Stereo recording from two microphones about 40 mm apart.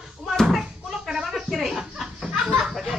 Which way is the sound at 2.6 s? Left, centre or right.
Centre.